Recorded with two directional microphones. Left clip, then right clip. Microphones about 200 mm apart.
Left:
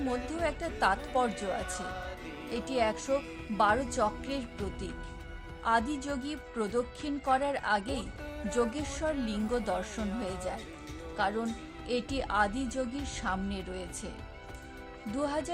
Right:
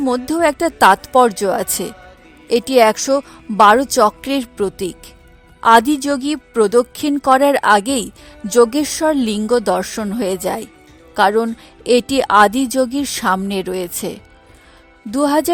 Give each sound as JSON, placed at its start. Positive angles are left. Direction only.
{"t": 0.1, "sound": "a woman's voice", "side_deg": -55}
{"t": 15.1, "sound": "speech", "side_deg": -55}